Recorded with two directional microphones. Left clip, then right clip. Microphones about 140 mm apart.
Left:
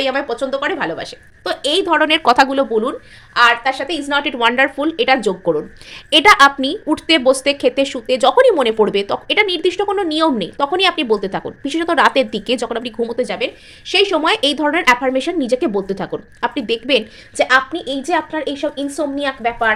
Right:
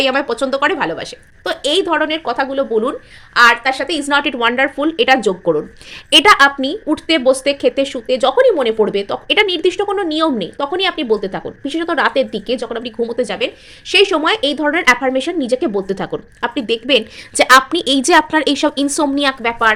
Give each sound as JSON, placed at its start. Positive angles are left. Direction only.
{"t": 0.0, "sound": "a woman's voice", "side_deg": -35}
{"t": 0.7, "sound": "a woman's voice", "side_deg": -25}
{"t": 2.2, "sound": "speech", "side_deg": 30}
{"t": 3.3, "sound": "a woman's voice", "side_deg": -35}
{"t": 4.4, "sound": "speech", "side_deg": -5}
{"t": 9.2, "sound": "speech", "side_deg": -15}
{"t": 13.1, "sound": "speech", "side_deg": -10}
{"t": 13.8, "sound": "a woman's voice", "side_deg": -20}
{"t": 14.2, "sound": "speech", "side_deg": -5}
{"t": 17.3, "sound": "a woman's voice", "side_deg": -40}
{"t": 17.7, "sound": "a woman's voice", "side_deg": -65}